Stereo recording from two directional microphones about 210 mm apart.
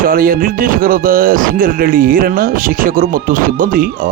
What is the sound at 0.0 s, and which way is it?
Speech, 45° right (ahead or behind).